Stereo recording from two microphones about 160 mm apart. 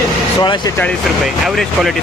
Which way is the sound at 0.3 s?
25° left (ahead or behind).